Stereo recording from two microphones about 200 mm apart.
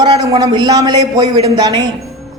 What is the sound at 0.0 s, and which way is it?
A man's voice, 20° right (ahead or behind).